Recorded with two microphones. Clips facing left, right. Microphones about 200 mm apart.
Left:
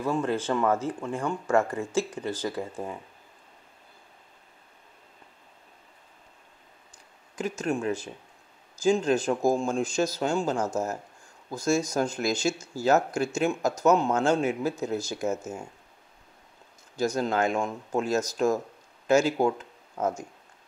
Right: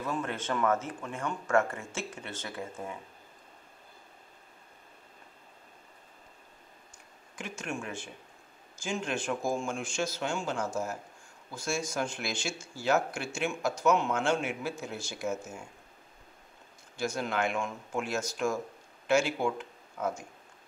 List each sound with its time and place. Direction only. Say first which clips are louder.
0.0 s speech: left 7 dB; 30° left (ahead or behind)
7.3 s speech: left 9 dB; 40° left (ahead or behind)
16.9 s speech: left 6 dB; 40° left (ahead or behind)